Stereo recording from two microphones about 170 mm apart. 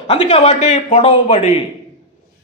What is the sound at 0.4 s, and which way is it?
A man's voice, 40° left (ahead or behind).